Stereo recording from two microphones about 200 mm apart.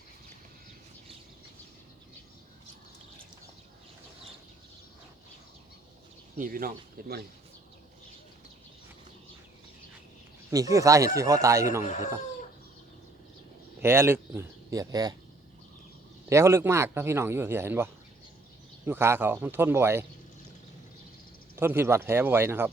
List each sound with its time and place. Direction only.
6.3 s speech: 45° right (ahead or behind)
10.5 s speech: 15° right (ahead or behind)
11.9 s speech: 35° left (ahead or behind)
13.8 s speech: 10° right (ahead or behind)
16.3 s speech: 15° right (ahead or behind)
18.9 s speech: 10° right (ahead or behind)
21.5 s speech: 10° right (ahead or behind)